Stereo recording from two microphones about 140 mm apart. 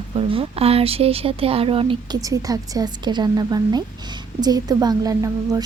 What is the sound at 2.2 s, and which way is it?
A woman's voice, 25° right (ahead or behind).